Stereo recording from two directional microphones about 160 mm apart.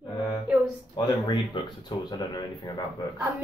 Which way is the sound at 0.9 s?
25° left (ahead or behind).